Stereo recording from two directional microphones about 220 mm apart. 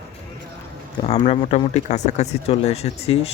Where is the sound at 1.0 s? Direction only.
30° left (ahead or behind).